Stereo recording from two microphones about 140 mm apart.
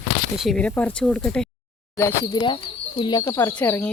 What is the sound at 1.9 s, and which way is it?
Speech, 20° left (ahead or behind).